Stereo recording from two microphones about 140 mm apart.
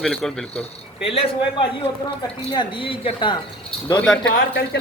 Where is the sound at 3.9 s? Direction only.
10° left (ahead or behind).